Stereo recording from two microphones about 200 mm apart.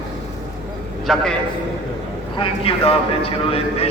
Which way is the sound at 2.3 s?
25° left (ahead or behind).